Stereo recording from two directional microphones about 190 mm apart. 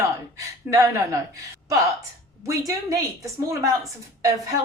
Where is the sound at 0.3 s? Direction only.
15° right (ahead or behind).